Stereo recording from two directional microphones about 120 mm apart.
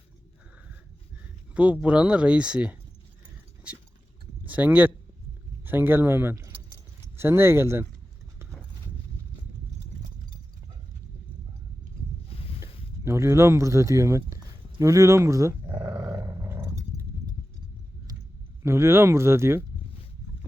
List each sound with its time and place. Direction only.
1.5 s speech: 10° right (ahead or behind)
3.7 s a sound: 10° right (ahead or behind)
4.4 s speech: 15° right (ahead or behind)
12.3 s boat: 55° left (ahead or behind)
13.1 s speech: 25° right (ahead or behind)
15.7 s dog: 40° right (ahead or behind)
16.0 s roar: 25° right (ahead or behind)
18.6 s speech: 20° right (ahead or behind)